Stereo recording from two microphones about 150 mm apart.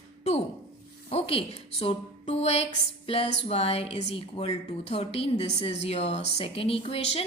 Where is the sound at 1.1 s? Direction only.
40° left (ahead or behind).